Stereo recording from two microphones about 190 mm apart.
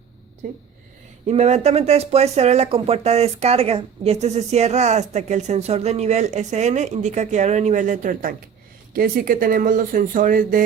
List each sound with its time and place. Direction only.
1.3 s speech: 35° right (ahead or behind)